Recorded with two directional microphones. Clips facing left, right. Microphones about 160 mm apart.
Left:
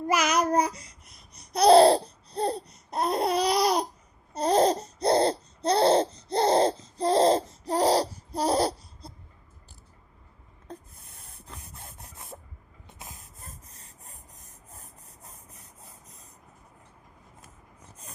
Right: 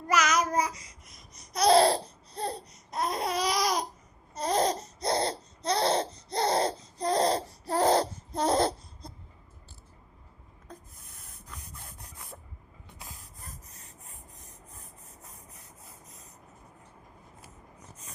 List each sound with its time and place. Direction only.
0.2 s child singing: 60° left (ahead or behind)
1.3 s laughter: 30° left (ahead or behind); by 7.9 s 15° left (ahead or behind)
7.9 s laughter: 35° left (ahead or behind)
8.4 s laughter: 10° left (ahead or behind)
10.7 s a sound: 30° left (ahead or behind)
11.2 s spray: 30° left (ahead or behind)